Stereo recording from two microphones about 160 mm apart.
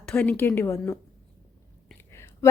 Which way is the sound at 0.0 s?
5° left (ahead or behind).